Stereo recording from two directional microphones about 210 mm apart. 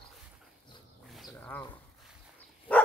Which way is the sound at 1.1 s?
Centre (ahead or behind).